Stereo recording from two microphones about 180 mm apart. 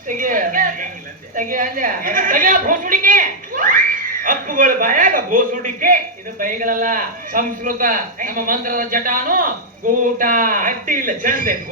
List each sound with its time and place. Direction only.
0.2 s music: 50° right (ahead or behind)
1.4 s a woman's voice: 45° right (ahead or behind)